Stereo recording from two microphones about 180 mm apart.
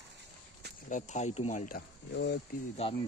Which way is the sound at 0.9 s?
45° left (ahead or behind).